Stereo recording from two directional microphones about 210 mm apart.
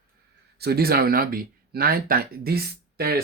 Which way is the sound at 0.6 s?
50° right (ahead or behind).